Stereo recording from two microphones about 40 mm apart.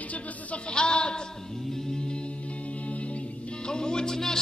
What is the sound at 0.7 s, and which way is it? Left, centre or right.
Speech, left.